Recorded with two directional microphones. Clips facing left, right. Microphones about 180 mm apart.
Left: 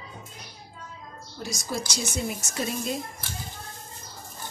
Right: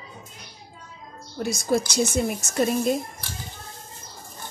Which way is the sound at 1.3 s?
55° right (ahead or behind).